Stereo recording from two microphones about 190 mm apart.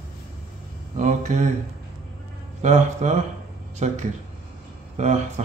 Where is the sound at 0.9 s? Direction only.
40° right (ahead or behind).